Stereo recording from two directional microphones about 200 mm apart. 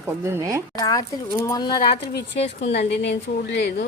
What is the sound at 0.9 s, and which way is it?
Speech, 20° left (ahead or behind).